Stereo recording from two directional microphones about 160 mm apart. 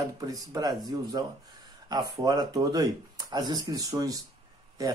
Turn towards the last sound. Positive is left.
turn(degrees=-20)  # may be behind; listen again after turning